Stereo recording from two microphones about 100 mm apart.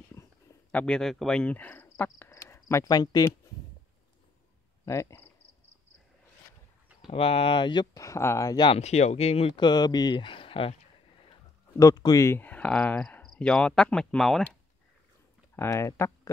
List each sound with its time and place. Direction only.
0.2 s a sound: 30° left (ahead or behind)
0.7 s speech: 10° left (ahead or behind); by 3.3 s 40° left (ahead or behind)
4.8 s speech: 30° left (ahead or behind)
7.1 s speech: 70° left (ahead or behind); by 8.0 s 45° left (ahead or behind)
8.0 s speech: 30° left (ahead or behind)
8.7 s speech: 90° left
9.6 s speech: 45° left (ahead or behind); by 10.8 s 65° left (ahead or behind)
11.8 s speech: 40° left (ahead or behind)
12.3 s speech: 20° left (ahead or behind)
15.5 s speech: 25° left (ahead or behind)